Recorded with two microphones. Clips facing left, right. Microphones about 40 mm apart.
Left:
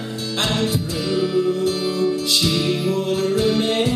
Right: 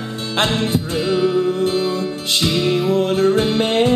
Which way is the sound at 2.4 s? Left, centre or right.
Right.